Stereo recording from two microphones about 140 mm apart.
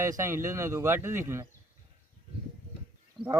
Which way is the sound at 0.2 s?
20° right (ahead or behind).